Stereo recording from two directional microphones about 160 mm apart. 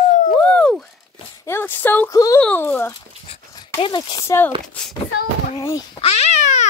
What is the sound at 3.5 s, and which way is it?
Speech, 25° left (ahead or behind).